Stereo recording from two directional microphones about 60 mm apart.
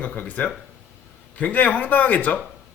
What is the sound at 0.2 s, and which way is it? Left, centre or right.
Speech, left.